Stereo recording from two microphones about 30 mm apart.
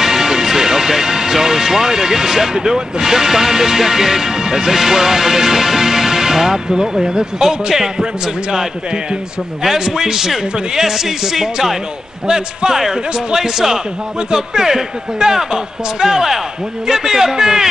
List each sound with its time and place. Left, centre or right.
0.0 s a man's voice: centre